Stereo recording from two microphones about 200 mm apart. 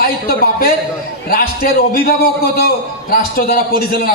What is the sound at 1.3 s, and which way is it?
A man's voice, 45° left (ahead or behind).